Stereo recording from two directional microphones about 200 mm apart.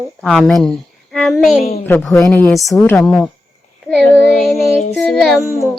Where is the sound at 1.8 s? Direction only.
10° left (ahead or behind).